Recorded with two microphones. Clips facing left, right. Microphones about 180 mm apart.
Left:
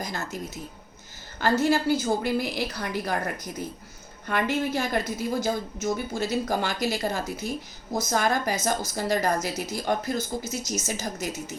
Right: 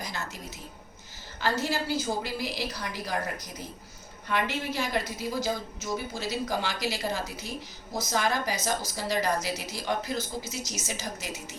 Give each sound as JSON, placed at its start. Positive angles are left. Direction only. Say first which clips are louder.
{"t": 0.0, "sound": "a woman's voice", "louder": "left 4 dB", "side_deg": 45}
{"t": 1.4, "sound": "a woman's voice", "louder": "left 6 dB", "side_deg": 50}